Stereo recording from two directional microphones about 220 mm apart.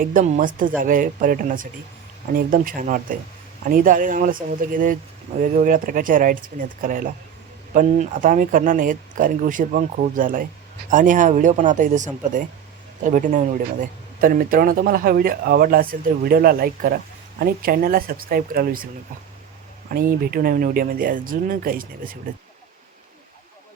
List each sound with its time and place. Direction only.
0.0 s speech: 35° right (ahead or behind)
19.9 s speech: 40° right (ahead or behind)